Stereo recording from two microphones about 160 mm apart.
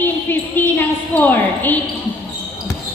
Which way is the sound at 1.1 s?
10° left (ahead or behind).